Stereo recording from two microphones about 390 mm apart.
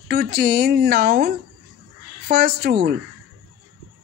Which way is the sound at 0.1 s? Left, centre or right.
Right.